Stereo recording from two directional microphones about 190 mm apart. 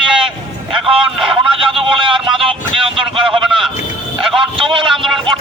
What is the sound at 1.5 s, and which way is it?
A man's voice, 30° right (ahead or behind).